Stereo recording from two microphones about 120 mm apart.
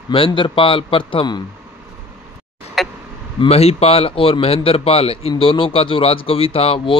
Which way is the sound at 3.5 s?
60° left (ahead or behind).